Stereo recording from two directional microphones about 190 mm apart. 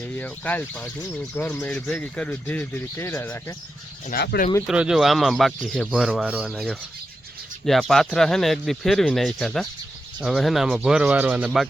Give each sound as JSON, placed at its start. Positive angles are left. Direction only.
{"t": 0.2, "sound": "speech", "side_deg": 10}
{"t": 4.1, "sound": "speech", "side_deg": 55}
{"t": 4.6, "sound": "speech", "side_deg": -5}